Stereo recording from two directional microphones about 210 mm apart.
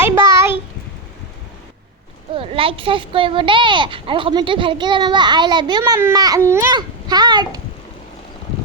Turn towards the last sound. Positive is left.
turn(degrees=-20)  # may be behind; listen again after turning